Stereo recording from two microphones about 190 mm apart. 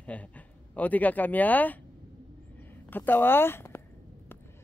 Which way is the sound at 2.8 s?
10° left (ahead or behind).